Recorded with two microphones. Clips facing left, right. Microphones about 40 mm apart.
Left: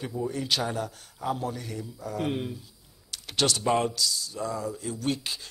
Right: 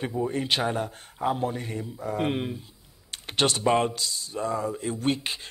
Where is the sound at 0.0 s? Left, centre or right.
Right.